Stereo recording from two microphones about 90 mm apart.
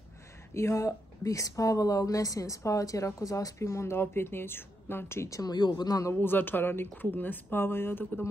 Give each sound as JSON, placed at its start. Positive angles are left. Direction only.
{"t": 0.6, "sound": "speech", "side_deg": 30}
{"t": 5.5, "sound": "speech", "side_deg": 55}
{"t": 6.1, "sound": "speech", "side_deg": 20}